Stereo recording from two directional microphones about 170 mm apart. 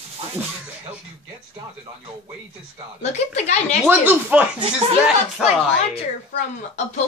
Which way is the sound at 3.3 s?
40° left (ahead or behind).